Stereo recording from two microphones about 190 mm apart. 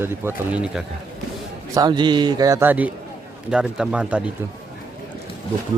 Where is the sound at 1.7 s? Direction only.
20° right (ahead or behind); by 4.2 s 5° right (ahead or behind).